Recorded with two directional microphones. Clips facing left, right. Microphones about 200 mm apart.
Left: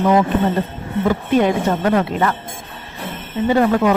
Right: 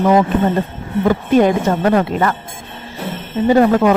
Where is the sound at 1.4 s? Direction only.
40° right (ahead or behind).